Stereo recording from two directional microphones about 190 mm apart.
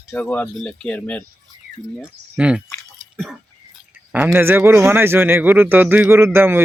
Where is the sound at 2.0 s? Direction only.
5° right (ahead or behind).